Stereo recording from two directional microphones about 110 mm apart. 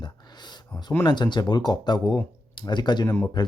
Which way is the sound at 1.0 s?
40° left (ahead or behind).